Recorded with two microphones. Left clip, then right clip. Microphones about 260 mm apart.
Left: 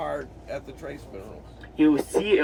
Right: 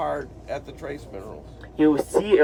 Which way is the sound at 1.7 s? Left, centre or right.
Centre.